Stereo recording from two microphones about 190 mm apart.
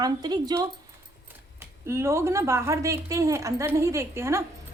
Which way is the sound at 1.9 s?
15° right (ahead or behind).